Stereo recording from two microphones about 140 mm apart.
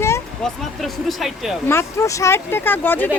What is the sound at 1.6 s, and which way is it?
Speech, 20° left (ahead or behind).